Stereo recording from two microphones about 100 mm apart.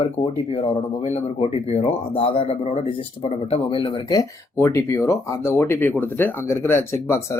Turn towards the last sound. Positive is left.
turn(degrees=25)  # may be behind; listen again after turning